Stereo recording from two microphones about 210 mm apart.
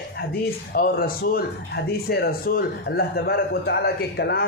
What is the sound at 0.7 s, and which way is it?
Speech, 45° left (ahead or behind).